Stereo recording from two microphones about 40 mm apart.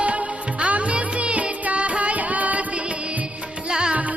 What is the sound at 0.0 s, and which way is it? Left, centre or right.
Music, right.